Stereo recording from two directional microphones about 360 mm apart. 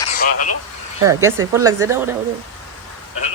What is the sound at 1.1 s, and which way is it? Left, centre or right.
A woman's voice, centre.